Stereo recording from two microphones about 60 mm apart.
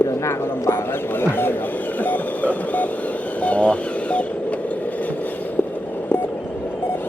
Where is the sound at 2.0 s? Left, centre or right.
Left.